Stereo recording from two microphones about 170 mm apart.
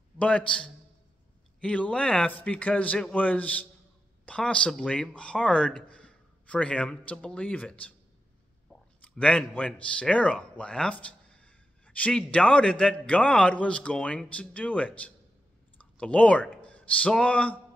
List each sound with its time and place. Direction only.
0.2 s speech: 5° left (ahead or behind)
9.0 s a man's voice: 5° left (ahead or behind)